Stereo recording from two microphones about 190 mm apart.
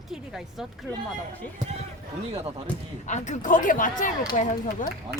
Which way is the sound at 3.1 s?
40° left (ahead or behind).